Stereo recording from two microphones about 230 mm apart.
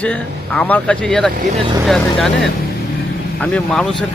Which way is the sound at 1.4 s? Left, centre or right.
Right.